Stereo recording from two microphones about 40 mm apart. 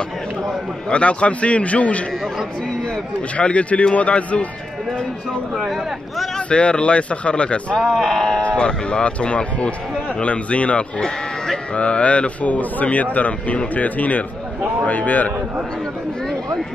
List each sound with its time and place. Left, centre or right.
0.8 s speech: left
3.3 s speech: left
6.3 s speech: left
7.9 s speech: centre
8.4 s speech: left
11.0 s sheep: centre
11.7 s a man's voice: left